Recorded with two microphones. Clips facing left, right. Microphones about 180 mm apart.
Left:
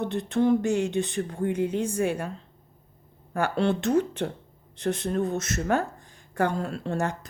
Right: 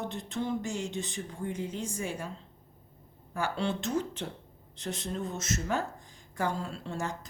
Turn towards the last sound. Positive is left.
turn(degrees=60)  # may be behind; listen again after turning